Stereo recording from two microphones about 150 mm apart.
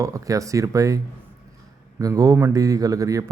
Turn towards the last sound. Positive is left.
turn(degrees=-20)  # may be behind; listen again after turning